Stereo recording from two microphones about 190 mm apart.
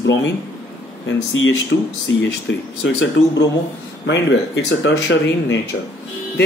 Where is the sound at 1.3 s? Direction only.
80° left.